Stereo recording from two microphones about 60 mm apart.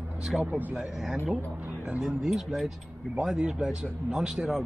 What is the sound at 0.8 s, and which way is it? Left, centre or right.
Speech, centre.